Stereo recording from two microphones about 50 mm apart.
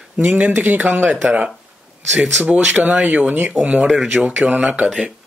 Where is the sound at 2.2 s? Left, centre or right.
Right.